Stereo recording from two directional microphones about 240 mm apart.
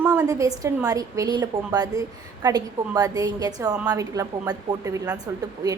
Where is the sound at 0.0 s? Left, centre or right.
Centre.